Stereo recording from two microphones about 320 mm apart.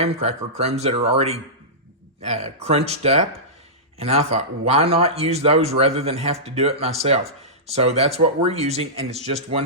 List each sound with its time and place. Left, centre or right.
0.0 s speech: centre